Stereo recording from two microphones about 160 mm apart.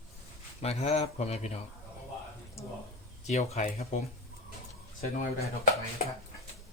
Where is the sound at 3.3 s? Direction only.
45° left (ahead or behind).